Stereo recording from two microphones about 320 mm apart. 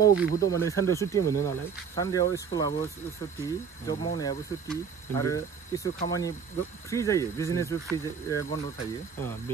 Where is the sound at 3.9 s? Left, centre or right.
Centre.